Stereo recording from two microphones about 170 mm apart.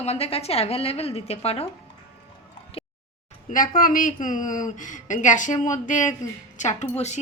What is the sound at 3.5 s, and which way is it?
Speech, 55° left (ahead or behind).